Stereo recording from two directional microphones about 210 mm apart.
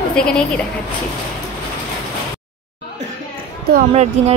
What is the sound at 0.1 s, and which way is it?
Speech, 5° left (ahead or behind).